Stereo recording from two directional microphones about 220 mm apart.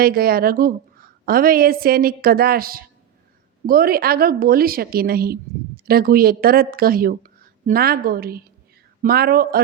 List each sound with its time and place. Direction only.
0.0 s a woman's voice: 40° right (ahead or behind)